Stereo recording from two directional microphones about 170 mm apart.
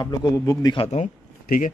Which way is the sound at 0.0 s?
20° left (ahead or behind).